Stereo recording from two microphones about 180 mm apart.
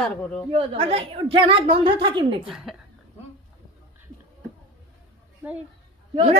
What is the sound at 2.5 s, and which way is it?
Speech, centre (ahead or behind).